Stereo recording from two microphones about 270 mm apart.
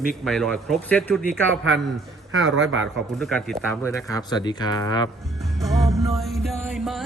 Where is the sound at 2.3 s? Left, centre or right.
Right.